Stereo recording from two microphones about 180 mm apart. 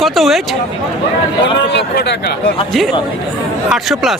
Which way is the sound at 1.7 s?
70° left (ahead or behind).